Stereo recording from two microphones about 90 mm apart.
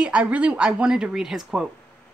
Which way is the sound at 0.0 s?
15° right (ahead or behind).